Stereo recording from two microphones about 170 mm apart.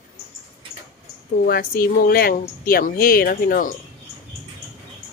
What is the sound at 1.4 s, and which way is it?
Speech, 60° left (ahead or behind).